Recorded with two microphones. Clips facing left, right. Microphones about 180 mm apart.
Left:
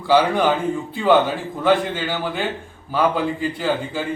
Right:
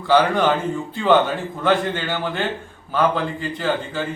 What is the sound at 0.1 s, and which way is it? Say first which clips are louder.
Speech: even; 5° left (ahead or behind).